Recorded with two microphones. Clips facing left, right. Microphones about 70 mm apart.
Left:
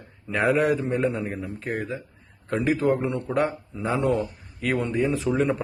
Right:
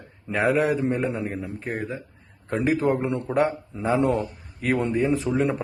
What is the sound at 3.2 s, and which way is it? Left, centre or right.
Speech, centre.